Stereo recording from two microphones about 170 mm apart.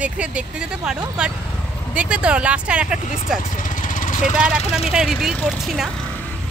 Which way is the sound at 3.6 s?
50° left (ahead or behind).